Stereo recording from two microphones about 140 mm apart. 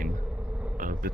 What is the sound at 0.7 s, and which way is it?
Speech, 75° right (ahead or behind).